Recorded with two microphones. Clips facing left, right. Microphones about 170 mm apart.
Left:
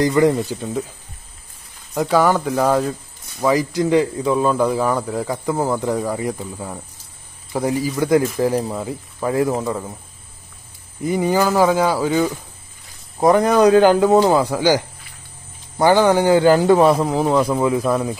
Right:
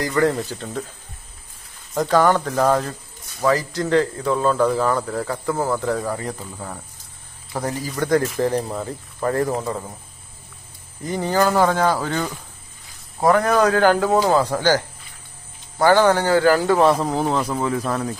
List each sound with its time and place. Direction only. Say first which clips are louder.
0.0 s speech: left 4 dB; 15° left (ahead or behind)
2.0 s speech: left 1 dB; 10° left (ahead or behind)
11.1 s speech: left 2 dB; 10° left (ahead or behind)
13.2 s speech: left 3 dB; 20° left (ahead or behind)
14.4 s speech: left 2 dB; 10° left (ahead or behind)
15.8 s speech: left 2 dB; 15° left (ahead or behind)
16.9 s speech: left 4 dB; centre (ahead or behind)